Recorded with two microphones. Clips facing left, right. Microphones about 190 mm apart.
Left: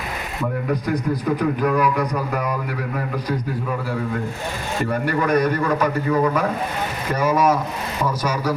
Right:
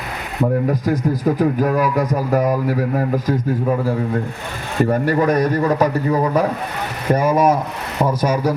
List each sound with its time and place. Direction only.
0.7 s a man's voice: 40° right (ahead or behind)
7.1 s a man's voice: 50° right (ahead or behind)